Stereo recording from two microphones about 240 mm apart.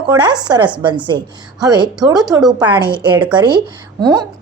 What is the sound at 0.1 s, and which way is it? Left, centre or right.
A woman's voice, centre.